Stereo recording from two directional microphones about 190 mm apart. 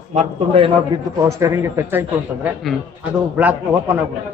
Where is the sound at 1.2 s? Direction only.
15° right (ahead or behind).